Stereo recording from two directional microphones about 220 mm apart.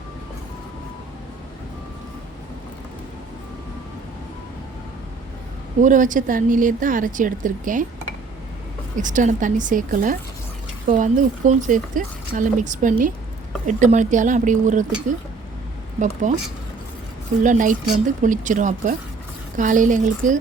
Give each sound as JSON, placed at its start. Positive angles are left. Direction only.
{"t": 5.8, "sound": "speech", "side_deg": -35}
{"t": 9.0, "sound": "speech", "side_deg": -35}
{"t": 16.3, "sound": "speech", "side_deg": -35}
{"t": 17.4, "sound": "speech", "side_deg": -35}